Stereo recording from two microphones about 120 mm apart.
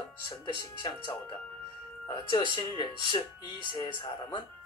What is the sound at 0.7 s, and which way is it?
Speech, 40° left (ahead or behind).